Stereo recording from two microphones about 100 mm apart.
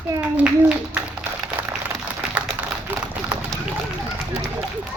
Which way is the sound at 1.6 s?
15° right (ahead or behind).